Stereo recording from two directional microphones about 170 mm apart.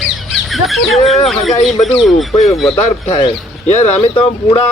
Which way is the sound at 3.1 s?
35° left (ahead or behind).